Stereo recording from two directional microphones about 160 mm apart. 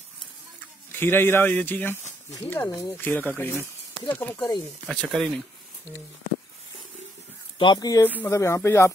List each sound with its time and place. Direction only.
0.9 s speech: 15° left (ahead or behind)
4.4 s speech: 25° left (ahead or behind)
4.8 s speech: centre (ahead or behind)
7.5 s speech: 30° left (ahead or behind)